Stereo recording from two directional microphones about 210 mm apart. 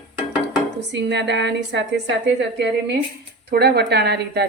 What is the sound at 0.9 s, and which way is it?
A woman's voice, 55° right (ahead or behind).